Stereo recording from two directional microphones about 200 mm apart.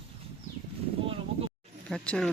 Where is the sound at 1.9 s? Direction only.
5° left (ahead or behind).